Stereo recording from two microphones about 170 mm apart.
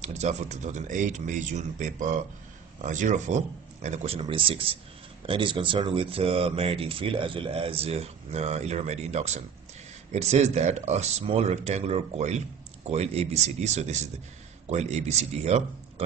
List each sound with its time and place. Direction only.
0.0 s speech: 40° right (ahead or behind)